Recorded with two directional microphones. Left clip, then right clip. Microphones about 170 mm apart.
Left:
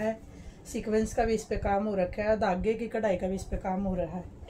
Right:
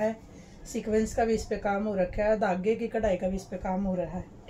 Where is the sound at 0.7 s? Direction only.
30° left (ahead or behind).